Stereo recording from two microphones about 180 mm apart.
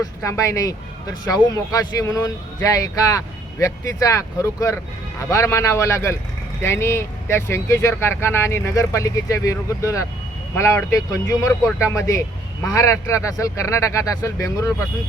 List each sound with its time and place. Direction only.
0.2 s speech: 15° left (ahead or behind)